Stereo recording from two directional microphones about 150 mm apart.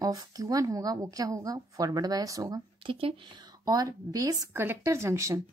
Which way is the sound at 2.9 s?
40° right (ahead or behind).